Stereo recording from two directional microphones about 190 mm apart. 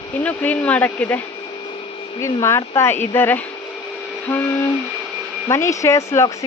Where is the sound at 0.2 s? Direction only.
10° left (ahead or behind).